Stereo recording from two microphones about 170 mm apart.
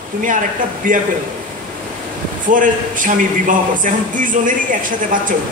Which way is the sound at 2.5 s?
50° right (ahead or behind).